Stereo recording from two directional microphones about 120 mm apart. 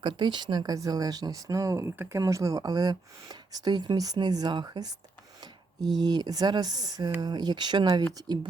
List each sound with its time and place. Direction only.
0.0 s speech: 40° right (ahead or behind)